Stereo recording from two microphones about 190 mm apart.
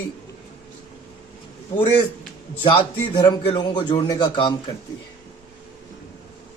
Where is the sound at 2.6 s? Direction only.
25° left (ahead or behind).